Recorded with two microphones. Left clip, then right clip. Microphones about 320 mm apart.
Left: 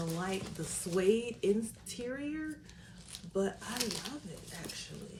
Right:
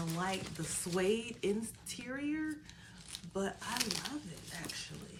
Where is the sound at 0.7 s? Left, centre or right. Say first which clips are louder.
Left 4 dB; centre.